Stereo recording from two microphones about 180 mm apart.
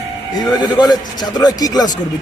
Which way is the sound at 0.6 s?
25° left (ahead or behind).